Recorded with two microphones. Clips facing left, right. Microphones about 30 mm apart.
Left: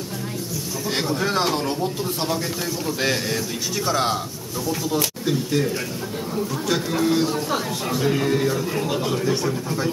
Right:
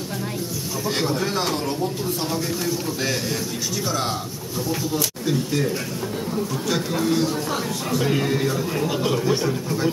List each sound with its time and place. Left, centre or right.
1.2 s speech: centre
5.2 s speech: centre
8.0 s speech: centre